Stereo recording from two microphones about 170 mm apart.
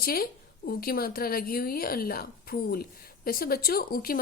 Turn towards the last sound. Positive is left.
turn(degrees=60)  # may be behind; listen again after turning